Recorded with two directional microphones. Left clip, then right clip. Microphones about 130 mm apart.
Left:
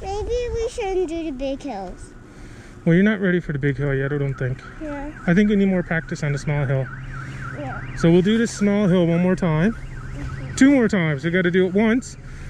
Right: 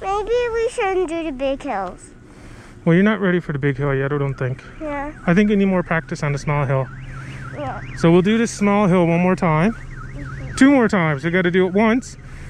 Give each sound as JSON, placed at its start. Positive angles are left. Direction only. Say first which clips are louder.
{"t": 0.0, "sound": "speech", "louder": "right 6 dB", "side_deg": -40}
{"t": 0.8, "sound": "speech", "louder": "right 6 dB", "side_deg": 15}
{"t": 1.4, "sound": "a woman's voice", "louder": "right 5 dB", "side_deg": -40}
{"t": 2.8, "sound": "speech", "louder": "right 2 dB", "side_deg": 0}